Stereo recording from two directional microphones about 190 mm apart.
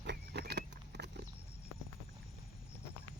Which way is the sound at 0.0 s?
60° right (ahead or behind).